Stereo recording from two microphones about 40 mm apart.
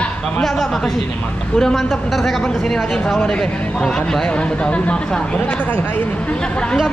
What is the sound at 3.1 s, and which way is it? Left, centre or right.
Speech, left.